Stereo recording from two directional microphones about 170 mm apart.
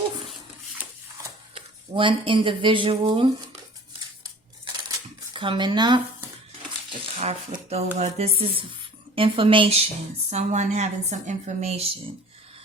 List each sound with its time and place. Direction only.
1.5 s speech: 30° right (ahead or behind)
5.3 s speech: 30° right (ahead or behind)
7.0 s speech: 35° right (ahead or behind)
7.9 s a sound: 40° right (ahead or behind)
10.2 s a woman's voice: 45° right (ahead or behind)